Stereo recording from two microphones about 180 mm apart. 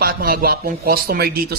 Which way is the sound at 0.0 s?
55° right (ahead or behind).